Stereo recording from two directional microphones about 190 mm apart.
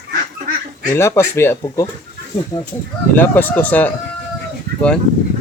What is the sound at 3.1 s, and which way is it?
Speech, 10° left (ahead or behind).